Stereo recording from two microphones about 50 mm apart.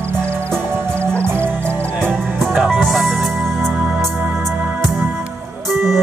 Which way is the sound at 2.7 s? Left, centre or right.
Centre.